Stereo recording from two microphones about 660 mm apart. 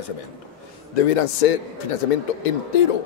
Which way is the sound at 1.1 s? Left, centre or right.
Left.